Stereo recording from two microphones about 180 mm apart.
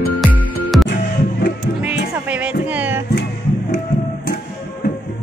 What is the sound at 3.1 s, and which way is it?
Music, 65° left (ahead or behind).